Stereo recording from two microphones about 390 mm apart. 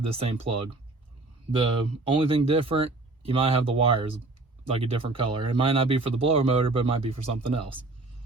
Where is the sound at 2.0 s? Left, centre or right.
Centre.